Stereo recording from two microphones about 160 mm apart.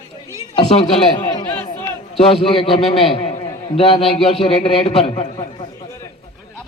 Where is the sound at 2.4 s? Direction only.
35° left (ahead or behind).